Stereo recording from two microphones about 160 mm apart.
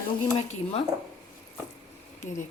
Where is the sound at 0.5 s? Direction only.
40° left (ahead or behind).